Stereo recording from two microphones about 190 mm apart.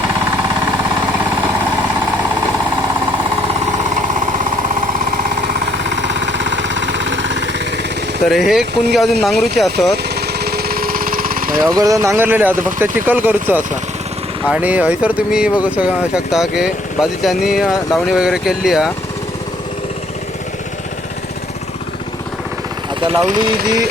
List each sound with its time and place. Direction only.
5.7 s a sound: 65° right (ahead or behind)
8.3 s speech: centre (ahead or behind)
10.2 s vehicle: 55° right (ahead or behind)
11.7 s speech: 20° right (ahead or behind); by 18.9 s 5° right (ahead or behind)
23.0 s speech: 30° right (ahead or behind)